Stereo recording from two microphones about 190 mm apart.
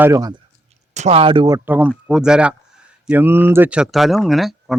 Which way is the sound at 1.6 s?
10° right (ahead or behind).